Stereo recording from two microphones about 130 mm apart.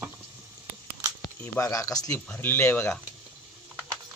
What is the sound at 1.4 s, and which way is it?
Speech, 25° left (ahead or behind).